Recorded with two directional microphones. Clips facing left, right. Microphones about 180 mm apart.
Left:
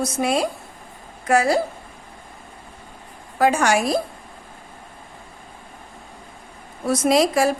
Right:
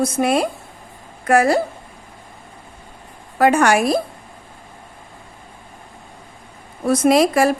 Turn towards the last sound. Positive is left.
turn(degrees=-55)  # may be behind; listen again after turning